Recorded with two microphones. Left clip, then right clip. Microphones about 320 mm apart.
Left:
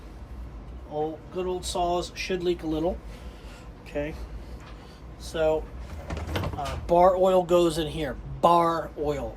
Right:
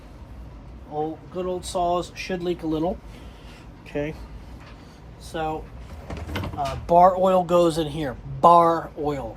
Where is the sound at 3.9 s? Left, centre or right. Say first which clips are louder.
Right 3 dB; right.